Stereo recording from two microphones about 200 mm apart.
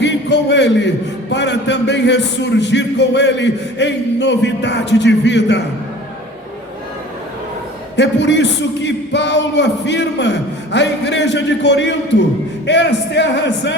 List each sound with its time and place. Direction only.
0.0 s a man's voice: 60° left (ahead or behind)
7.9 s a man's voice: 60° left (ahead or behind)